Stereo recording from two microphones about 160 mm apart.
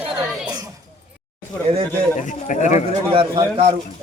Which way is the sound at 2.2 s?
50° left (ahead or behind).